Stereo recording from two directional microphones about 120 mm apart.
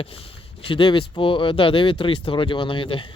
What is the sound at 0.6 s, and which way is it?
Speech, 45° left (ahead or behind).